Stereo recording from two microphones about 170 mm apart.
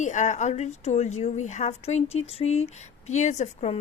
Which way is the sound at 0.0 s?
45° left (ahead or behind).